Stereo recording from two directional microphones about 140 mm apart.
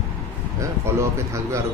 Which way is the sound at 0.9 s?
20° right (ahead or behind).